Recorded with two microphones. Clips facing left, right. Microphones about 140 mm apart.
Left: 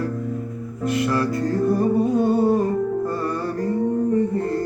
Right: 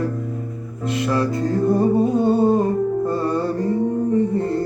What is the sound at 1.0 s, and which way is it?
Music, 25° right (ahead or behind).